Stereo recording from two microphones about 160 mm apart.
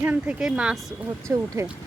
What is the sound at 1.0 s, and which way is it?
Speech, 20° right (ahead or behind).